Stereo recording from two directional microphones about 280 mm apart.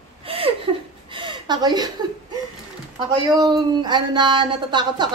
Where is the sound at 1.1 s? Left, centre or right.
Centre.